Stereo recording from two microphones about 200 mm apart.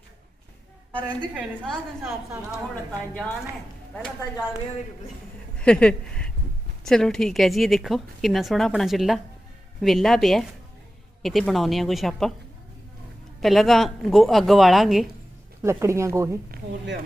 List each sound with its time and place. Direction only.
1.3 s a woman's voice: centre (ahead or behind)
3.9 s a woman's voice: 5° left (ahead or behind)
5.5 s a woman's voice: 5° left (ahead or behind)
13.4 s a woman's voice: centre (ahead or behind)
15.6 s speech: 15° right (ahead or behind)
16.5 s speech: 55° right (ahead or behind)